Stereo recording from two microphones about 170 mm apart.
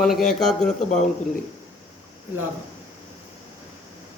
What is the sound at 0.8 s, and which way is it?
Speech, 45° left (ahead or behind).